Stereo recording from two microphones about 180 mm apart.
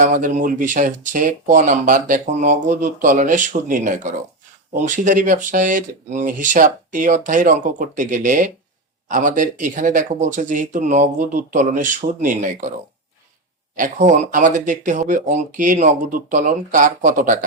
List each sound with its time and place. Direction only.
0.0 s speech: 40° right (ahead or behind)
13.7 s speech: 45° right (ahead or behind)